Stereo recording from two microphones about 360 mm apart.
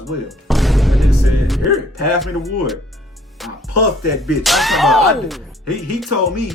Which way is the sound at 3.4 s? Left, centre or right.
Centre.